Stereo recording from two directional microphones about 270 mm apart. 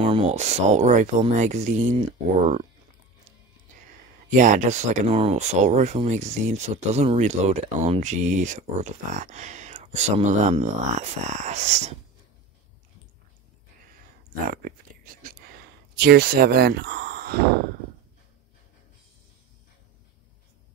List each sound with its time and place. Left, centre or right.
0.0 s speech: right
4.3 s speech: right
14.5 s whispering: right
16.0 s speech: right